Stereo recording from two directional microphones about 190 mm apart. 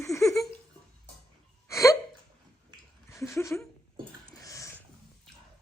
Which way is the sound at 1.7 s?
15° left (ahead or behind).